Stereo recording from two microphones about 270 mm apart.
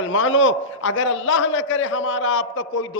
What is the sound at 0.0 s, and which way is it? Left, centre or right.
A man's voice, left.